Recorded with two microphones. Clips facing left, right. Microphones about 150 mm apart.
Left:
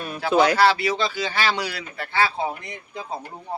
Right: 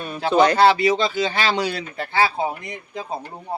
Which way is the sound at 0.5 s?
20° right (ahead or behind).